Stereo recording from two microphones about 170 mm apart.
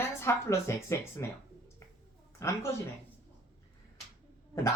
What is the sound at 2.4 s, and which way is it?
Speech, 15° left (ahead or behind).